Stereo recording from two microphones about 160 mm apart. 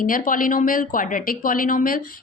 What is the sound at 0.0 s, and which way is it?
A woman's voice, 60° left (ahead or behind).